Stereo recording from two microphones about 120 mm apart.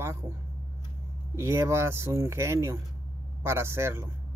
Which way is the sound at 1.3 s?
20° right (ahead or behind).